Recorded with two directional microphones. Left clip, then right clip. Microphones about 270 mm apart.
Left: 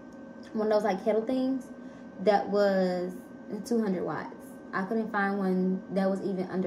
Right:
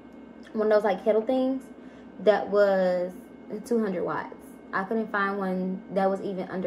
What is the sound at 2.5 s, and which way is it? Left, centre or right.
Speech, centre.